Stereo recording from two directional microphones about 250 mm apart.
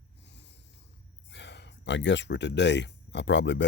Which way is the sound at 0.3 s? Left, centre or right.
Left.